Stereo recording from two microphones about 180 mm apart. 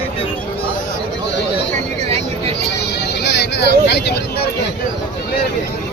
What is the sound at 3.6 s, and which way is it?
Vehicle, 70° left (ahead or behind).